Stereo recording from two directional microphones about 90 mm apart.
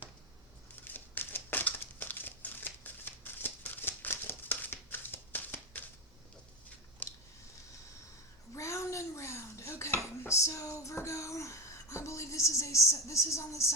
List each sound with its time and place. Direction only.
0.9 s crushing: 20° left (ahead or behind)
7.0 s a sound: 15° left (ahead or behind)
8.5 s dishes: 35° left (ahead or behind)